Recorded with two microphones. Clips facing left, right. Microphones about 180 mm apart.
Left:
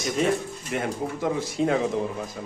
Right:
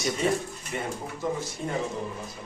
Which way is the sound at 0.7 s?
75° left (ahead or behind).